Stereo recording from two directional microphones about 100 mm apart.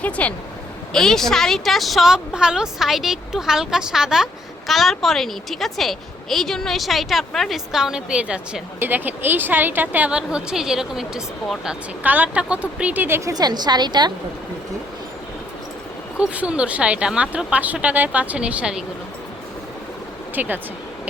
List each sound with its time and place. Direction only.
0.0 s a woman's voice: 15° left (ahead or behind); by 11.8 s 5° right (ahead or behind)
12.0 s speech: 15° right (ahead or behind)
13.3 s a woman's voice: 45° right (ahead or behind)
16.1 s speech: 10° right (ahead or behind)
20.3 s speech: 20° right (ahead or behind)